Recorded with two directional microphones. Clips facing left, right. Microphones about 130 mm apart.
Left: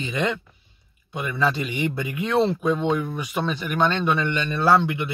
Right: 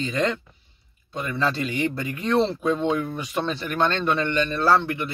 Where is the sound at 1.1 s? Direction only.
10° left (ahead or behind).